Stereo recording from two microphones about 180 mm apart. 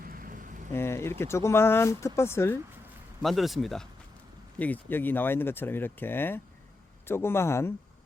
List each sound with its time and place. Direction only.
0.0 s a sound: 50° right (ahead or behind)
0.7 s speech: 15° left (ahead or behind)
3.2 s speech: centre (ahead or behind)